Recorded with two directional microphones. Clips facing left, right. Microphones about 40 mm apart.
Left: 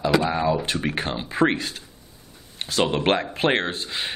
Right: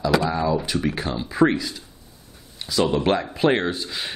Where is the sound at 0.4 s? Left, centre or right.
Left.